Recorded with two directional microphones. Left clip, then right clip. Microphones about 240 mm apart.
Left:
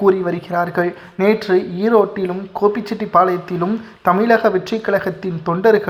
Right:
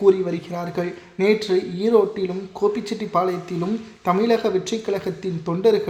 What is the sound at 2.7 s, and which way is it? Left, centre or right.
Speech, centre.